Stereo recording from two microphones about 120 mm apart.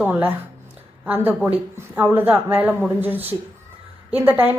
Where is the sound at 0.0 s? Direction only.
15° right (ahead or behind).